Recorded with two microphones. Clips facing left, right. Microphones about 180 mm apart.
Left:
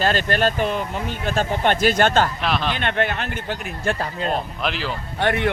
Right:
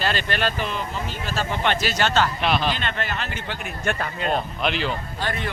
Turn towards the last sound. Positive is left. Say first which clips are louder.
# left 7 dB
turn(degrees=65)  # may be behind; listen again after turning